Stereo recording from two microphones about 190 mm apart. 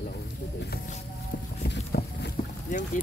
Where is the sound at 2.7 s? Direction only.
40° left (ahead or behind).